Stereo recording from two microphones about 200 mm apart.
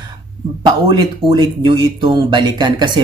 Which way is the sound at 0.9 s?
25° right (ahead or behind).